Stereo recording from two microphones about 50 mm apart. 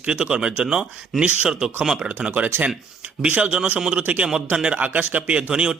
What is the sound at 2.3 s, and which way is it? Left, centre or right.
A man's voice, right.